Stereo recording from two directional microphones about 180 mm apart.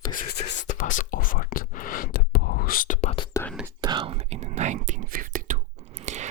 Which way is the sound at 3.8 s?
25° right (ahead or behind).